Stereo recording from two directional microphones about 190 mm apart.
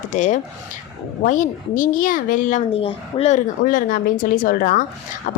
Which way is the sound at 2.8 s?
30° left (ahead or behind).